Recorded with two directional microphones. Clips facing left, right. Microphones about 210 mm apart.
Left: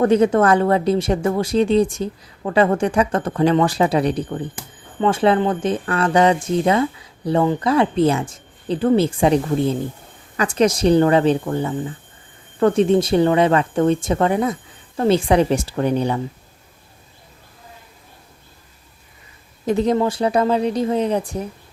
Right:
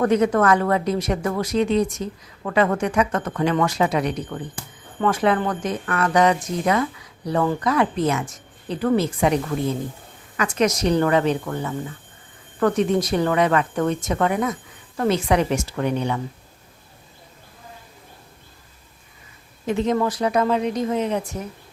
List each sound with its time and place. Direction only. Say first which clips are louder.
0.0 s speech: left 3 dB; 30° left (ahead or behind)
19.6 s speech: left 3 dB; 35° left (ahead or behind)